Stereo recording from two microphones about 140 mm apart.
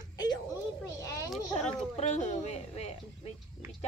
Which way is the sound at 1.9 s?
55° left (ahead or behind).